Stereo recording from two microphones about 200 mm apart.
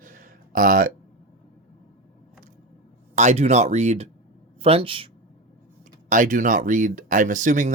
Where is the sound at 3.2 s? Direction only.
35° right (ahead or behind).